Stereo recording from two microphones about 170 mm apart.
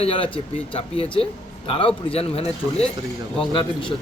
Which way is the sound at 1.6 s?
30° left (ahead or behind).